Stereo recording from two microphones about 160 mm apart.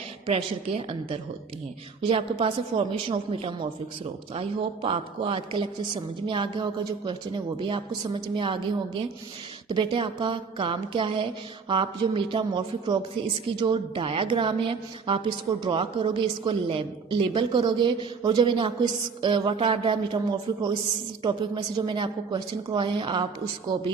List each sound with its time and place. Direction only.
0.3 s a woman's voice: 40° right (ahead or behind)
9.6 s a woman's voice: 30° right (ahead or behind)